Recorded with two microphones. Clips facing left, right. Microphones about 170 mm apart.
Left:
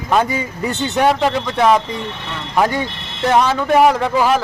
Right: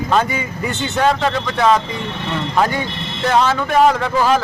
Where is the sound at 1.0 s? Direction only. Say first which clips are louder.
Left 1 dB; 15° left (ahead or behind).